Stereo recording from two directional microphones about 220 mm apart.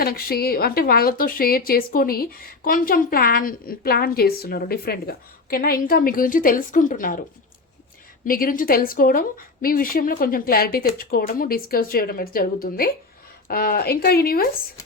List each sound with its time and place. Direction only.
0.0 s a woman's voice: 45° left (ahead or behind)